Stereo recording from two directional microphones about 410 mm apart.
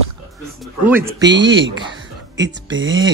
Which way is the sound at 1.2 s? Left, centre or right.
Right.